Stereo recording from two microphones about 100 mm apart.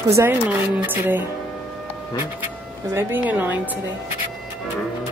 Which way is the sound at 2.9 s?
20° right (ahead or behind).